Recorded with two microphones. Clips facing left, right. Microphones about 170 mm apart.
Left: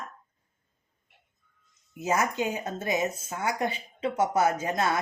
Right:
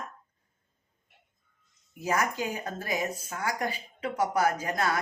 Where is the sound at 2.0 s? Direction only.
20° left (ahead or behind).